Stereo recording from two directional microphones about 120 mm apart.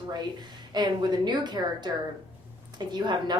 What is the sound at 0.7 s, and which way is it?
A woman's voice, 35° right (ahead or behind).